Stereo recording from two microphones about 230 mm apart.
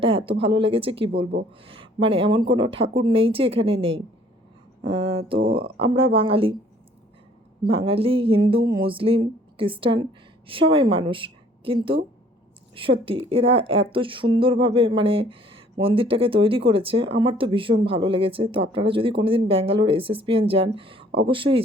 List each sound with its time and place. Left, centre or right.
0.0 s a woman's voice: right
7.6 s a woman's voice: right